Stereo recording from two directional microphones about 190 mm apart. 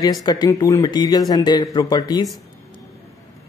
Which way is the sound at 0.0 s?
20° left (ahead or behind).